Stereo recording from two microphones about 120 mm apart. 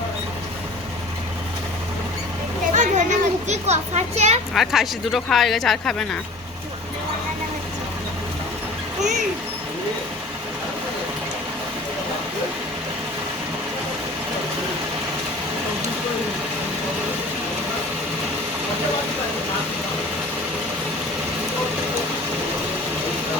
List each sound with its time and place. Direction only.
2.7 s children playing: 85° right; by 4.4 s 65° right (ahead or behind)
4.5 s speech: centre (ahead or behind)